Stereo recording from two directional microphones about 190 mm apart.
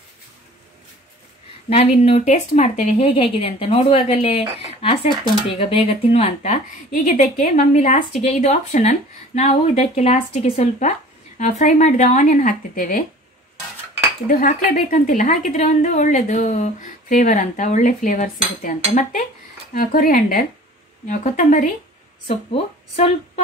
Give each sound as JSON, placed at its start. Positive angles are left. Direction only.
{"t": 1.7, "sound": "a woman's voice", "side_deg": 35}
{"t": 5.6, "sound": "a woman's voice", "side_deg": 30}
{"t": 14.2, "sound": "a woman's voice", "side_deg": 45}